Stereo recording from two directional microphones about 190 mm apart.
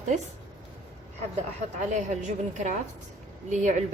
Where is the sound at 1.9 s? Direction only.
40° right (ahead or behind).